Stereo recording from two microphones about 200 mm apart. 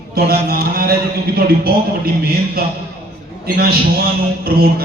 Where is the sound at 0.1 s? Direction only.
50° right (ahead or behind).